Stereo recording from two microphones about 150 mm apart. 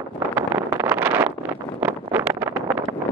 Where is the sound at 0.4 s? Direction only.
15° right (ahead or behind).